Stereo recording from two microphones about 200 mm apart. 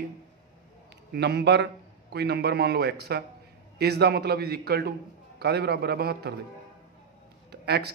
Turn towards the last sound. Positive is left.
turn(degrees=-55)  # may be behind; listen again after turning